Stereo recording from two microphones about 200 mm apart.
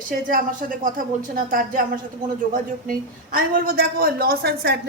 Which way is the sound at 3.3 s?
45° right (ahead or behind).